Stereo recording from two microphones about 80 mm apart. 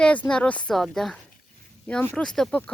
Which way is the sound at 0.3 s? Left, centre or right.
Centre.